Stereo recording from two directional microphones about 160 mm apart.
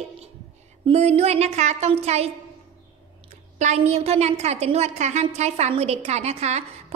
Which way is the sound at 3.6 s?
45° right (ahead or behind).